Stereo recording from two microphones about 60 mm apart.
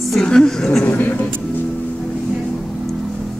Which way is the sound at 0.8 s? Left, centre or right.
Left.